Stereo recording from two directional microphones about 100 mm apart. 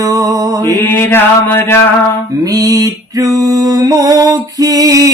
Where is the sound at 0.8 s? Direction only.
20° left (ahead or behind).